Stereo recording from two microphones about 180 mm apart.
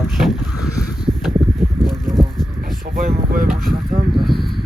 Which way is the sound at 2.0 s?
Centre (ahead or behind).